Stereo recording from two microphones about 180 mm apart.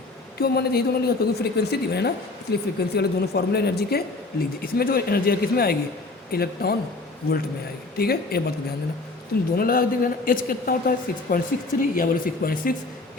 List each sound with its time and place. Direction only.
0.3 s a woman's voice: 60° left (ahead or behind)
7.9 s a woman's voice: 60° left (ahead or behind)
9.6 s a woman's voice: 55° left (ahead or behind)